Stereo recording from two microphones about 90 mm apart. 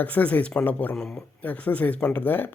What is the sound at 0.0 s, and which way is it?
Speech, 15° left (ahead or behind).